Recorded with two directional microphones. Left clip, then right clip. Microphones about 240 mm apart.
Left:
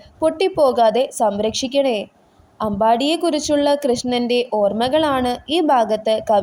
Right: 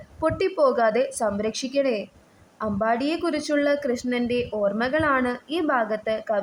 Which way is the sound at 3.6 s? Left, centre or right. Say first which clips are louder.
Left 6 dB; centre.